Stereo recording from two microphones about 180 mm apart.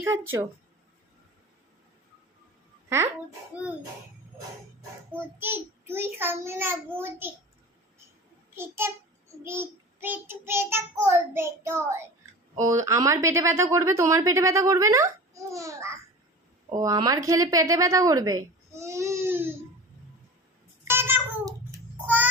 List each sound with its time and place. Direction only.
5.4 s a woman's voice: 10° right (ahead or behind)
8.5 s a woman's voice: 15° right (ahead or behind)
20.8 s babbling: 15° right (ahead or behind)